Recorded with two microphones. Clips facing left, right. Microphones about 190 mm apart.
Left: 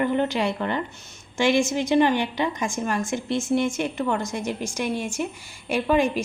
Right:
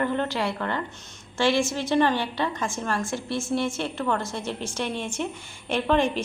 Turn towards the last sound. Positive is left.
turn(degrees=10)  # may be behind; listen again after turning